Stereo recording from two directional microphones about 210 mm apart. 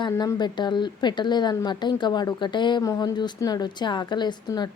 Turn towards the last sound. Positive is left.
turn(degrees=20)  # may be behind; listen again after turning